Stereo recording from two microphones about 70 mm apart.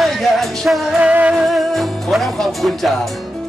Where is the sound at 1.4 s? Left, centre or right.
Centre.